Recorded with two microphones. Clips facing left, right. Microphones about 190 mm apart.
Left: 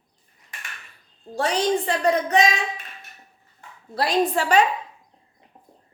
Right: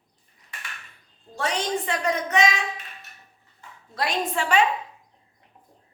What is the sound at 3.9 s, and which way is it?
Speech, 35° left (ahead or behind).